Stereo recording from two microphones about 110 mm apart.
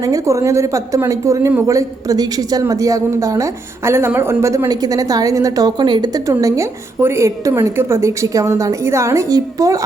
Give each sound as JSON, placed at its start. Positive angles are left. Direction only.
{"t": 0.0, "sound": "a woman's voice", "side_deg": -30}